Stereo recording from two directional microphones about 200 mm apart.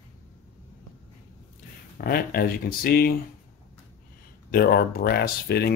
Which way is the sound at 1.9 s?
50° left (ahead or behind).